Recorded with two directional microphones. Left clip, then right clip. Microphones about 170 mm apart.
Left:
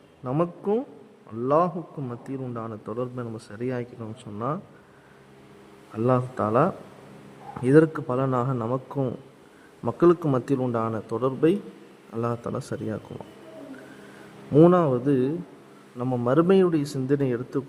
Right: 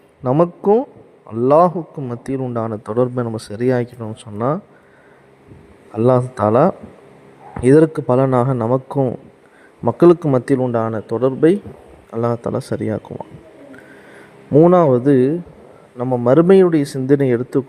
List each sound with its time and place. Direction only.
0.2 s speech: 25° right (ahead or behind)
1.3 s speech: 35° right (ahead or behind)
5.9 s speech: 30° right (ahead or behind)
14.7 s speech: 35° right (ahead or behind)